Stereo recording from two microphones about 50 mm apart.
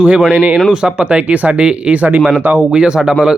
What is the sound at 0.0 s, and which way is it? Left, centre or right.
Speech, right.